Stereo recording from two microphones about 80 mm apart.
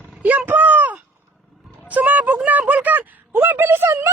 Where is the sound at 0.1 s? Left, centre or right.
Centre.